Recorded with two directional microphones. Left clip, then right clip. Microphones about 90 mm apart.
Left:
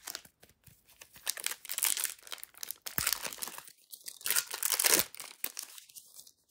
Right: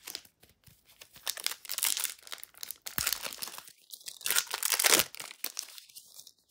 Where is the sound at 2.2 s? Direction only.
5° right (ahead or behind).